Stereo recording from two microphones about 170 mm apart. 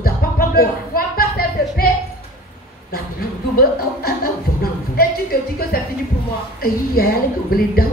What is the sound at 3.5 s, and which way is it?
A woman's voice, 60° left (ahead or behind).